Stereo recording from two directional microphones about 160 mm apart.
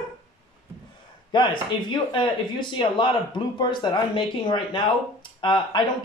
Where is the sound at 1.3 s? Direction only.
30° left (ahead or behind).